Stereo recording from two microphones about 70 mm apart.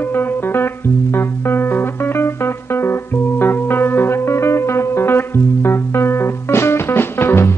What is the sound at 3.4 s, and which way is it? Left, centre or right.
Music, left.